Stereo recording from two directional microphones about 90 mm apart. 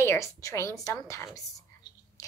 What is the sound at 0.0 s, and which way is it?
A woman's voice, 30° left (ahead or behind).